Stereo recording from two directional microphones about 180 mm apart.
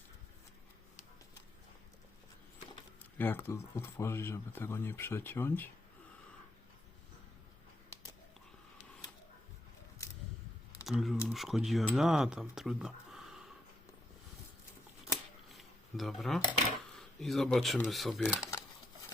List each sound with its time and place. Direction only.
3.2 s speech: 10° left (ahead or behind)
10.0 s a sound: 15° left (ahead or behind)
10.8 s speech: centre (ahead or behind)
15.5 s camera: centre (ahead or behind)
17.0 s speech: centre (ahead or behind)